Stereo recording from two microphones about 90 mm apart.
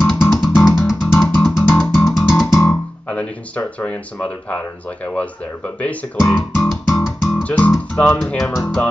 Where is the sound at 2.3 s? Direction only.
5° left (ahead or behind).